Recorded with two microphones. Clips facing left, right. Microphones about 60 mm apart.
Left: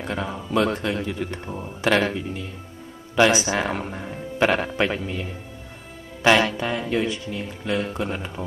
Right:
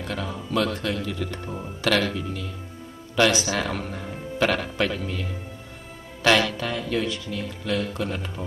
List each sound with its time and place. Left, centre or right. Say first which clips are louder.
0.0 s speech: left 2 dB; left